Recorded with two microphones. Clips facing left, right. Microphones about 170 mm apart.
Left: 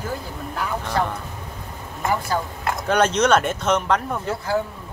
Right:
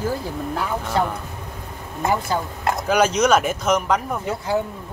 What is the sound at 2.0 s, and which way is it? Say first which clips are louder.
Speech: right 1 dB; 25° right (ahead or behind).